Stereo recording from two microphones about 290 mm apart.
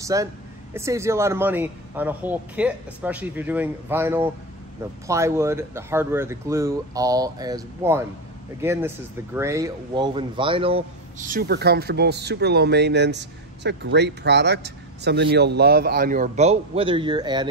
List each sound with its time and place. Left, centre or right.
0.0 s speech: centre
11.2 s speech: right; by 17.5 s centre